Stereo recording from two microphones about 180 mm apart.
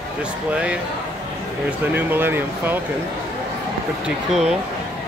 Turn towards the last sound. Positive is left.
turn(degrees=0)  # may be behind; listen again after turning